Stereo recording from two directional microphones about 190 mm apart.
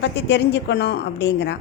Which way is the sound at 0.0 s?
65° left (ahead or behind).